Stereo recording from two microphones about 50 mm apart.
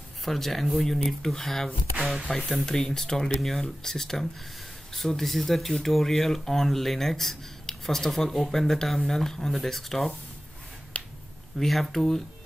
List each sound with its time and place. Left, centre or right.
0.2 s speech: centre
2.6 s speech: centre
10.9 s finger snapping: left
11.6 s speech: centre